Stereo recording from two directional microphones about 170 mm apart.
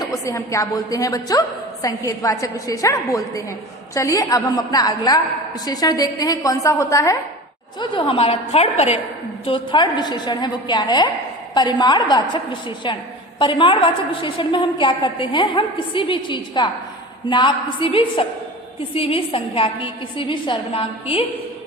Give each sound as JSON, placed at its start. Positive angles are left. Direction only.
{"t": 0.0, "sound": "a woman's voice", "side_deg": 20}
{"t": 7.8, "sound": "a woman's voice", "side_deg": 30}
{"t": 9.5, "sound": "a woman's voice", "side_deg": 25}